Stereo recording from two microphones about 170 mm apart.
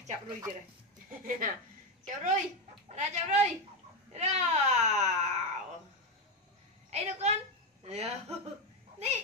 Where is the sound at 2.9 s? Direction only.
45° right (ahead or behind).